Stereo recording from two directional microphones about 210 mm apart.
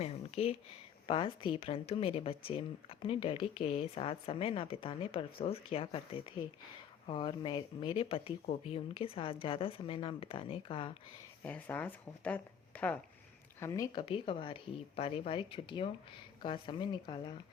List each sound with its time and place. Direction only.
0.0 s a sound: 30° left (ahead or behind)
1.0 s a woman's voice: 25° left (ahead or behind)
11.4 s a woman's voice: 5° left (ahead or behind); by 17.3 s 25° left (ahead or behind)